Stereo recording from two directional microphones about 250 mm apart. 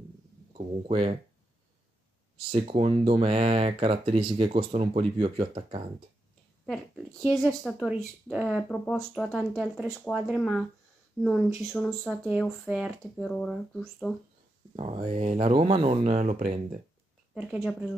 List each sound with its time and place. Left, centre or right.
0.5 s speech: right
2.3 s speech: right
6.6 s a sound: centre
7.4 s speech: centre
14.8 s speech: right
17.3 s speech: centre